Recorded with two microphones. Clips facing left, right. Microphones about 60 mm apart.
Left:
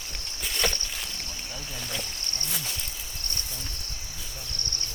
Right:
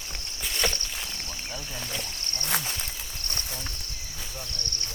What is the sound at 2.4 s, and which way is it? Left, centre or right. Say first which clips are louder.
Speech: right 7 dB; right.